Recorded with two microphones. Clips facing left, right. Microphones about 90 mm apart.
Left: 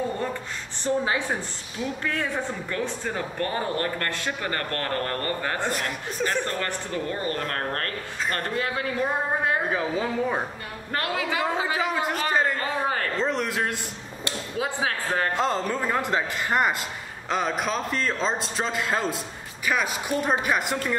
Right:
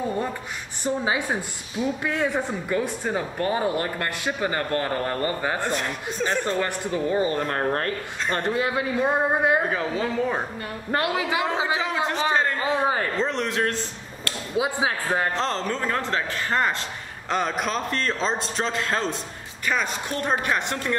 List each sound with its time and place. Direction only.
0.8 s speech: 10° right (ahead or behind)
5.7 s a man's voice: 5° left (ahead or behind)
6.4 s speech: 10° right (ahead or behind)
9.7 s a man's voice: 5° left (ahead or behind)
10.9 s a man's voice: 15° right (ahead or behind)
13.2 s speech: 5° left (ahead or behind)
14.6 s speech: 15° right (ahead or behind)
15.3 s a man's voice: 10° left (ahead or behind)
17.3 s a man's voice: centre (ahead or behind)